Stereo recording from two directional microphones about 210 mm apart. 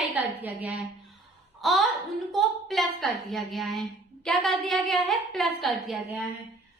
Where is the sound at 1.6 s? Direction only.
Centre (ahead or behind).